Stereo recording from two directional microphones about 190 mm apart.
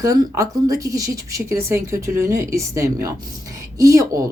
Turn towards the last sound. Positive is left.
turn(degrees=-15)  # may be behind; listen again after turning